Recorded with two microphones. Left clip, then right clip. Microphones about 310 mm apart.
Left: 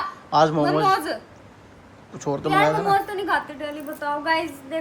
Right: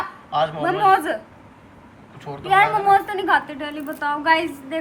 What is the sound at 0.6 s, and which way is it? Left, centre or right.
Speech, centre.